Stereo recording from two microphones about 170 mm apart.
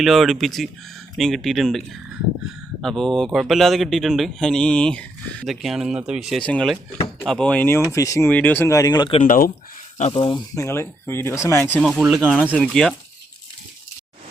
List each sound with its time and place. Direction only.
0.0 s speech: centre (ahead or behind)
2.8 s speech: centre (ahead or behind); by 9.2 s 25° left (ahead or behind)
9.2 s speech: 55° left (ahead or behind)
10.2 s speech: 25° left (ahead or behind)
11.8 s speech: centre (ahead or behind)